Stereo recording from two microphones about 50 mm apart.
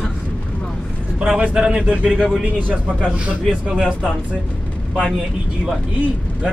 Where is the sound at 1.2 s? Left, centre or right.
Centre.